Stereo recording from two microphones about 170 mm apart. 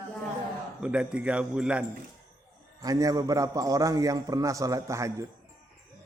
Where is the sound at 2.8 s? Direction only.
20° right (ahead or behind).